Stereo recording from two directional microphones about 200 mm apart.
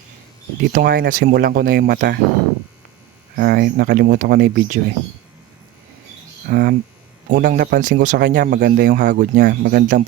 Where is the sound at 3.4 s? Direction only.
50° right (ahead or behind).